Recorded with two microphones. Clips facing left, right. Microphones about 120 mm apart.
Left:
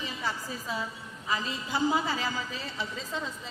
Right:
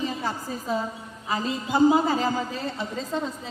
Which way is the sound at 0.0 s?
45° right (ahead or behind).